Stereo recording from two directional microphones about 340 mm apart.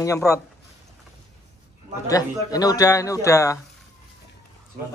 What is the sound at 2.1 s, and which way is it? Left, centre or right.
Speech, centre.